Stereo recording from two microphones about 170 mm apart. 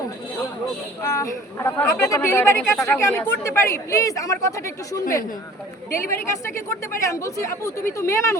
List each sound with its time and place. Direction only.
1.0 s speech: 20° left (ahead or behind)
6.1 s speech: 15° left (ahead or behind)